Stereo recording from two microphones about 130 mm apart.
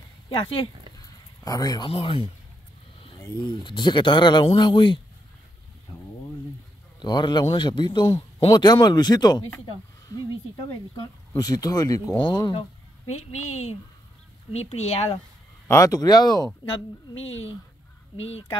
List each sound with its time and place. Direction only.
0.3 s speech: 40° left (ahead or behind)
0.9 s a sound: 25° left (ahead or behind)
1.9 s speech: 45° left (ahead or behind)
3.3 s speech: 35° left (ahead or behind)
7.0 s speech: 35° left (ahead or behind)
11.0 s speech: 30° left (ahead or behind)
12.5 s a woman's voice: 55° left (ahead or behind)
15.7 s speech: 25° left (ahead or behind)